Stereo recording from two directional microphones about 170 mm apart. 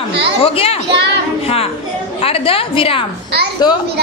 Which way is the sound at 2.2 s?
35° left (ahead or behind).